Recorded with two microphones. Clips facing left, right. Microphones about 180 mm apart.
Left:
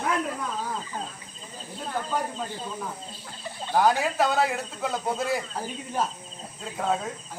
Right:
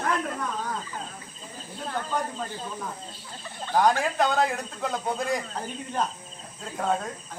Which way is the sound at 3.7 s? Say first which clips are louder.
Even; 5° left (ahead or behind).